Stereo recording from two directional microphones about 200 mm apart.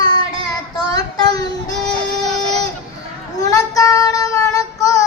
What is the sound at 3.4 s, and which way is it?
Child singing, 15° left (ahead or behind).